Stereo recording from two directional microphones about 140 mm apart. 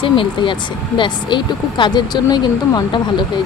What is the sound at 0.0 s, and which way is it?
Speech, 35° left (ahead or behind).